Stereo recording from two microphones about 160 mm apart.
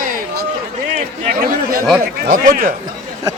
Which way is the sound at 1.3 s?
65° right (ahead or behind).